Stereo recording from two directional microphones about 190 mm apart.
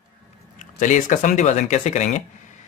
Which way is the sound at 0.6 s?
40° left (ahead or behind).